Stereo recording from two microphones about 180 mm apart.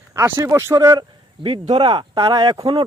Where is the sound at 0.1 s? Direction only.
15° right (ahead or behind).